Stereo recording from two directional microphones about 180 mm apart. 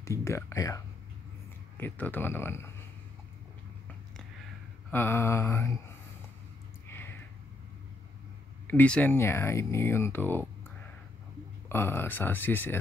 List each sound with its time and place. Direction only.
0.0 s speech: 15° left (ahead or behind)
4.9 s speech: 10° left (ahead or behind)
6.9 s a sound: 10° left (ahead or behind)
8.6 s speech: 10° left (ahead or behind)
11.7 s speech: 10° left (ahead or behind)